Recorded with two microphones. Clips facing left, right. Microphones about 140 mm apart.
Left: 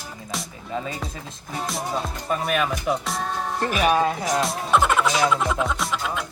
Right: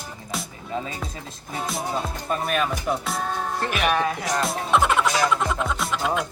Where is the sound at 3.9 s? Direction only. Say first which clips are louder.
Left 3 dB; 20° left (ahead or behind).